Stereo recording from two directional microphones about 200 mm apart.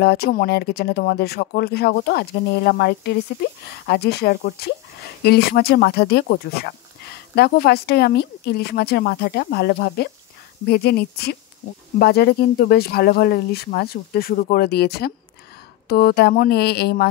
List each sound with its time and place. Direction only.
0.0 s speech: 50° left (ahead or behind)